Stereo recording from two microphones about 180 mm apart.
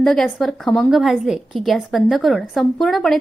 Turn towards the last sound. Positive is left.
turn(degrees=0)  # may be behind; listen again after turning